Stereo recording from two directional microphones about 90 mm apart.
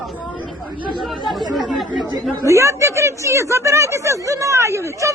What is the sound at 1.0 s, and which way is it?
Chatter, centre (ahead or behind).